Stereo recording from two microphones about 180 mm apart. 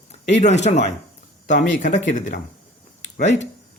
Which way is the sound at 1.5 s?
45° left (ahead or behind).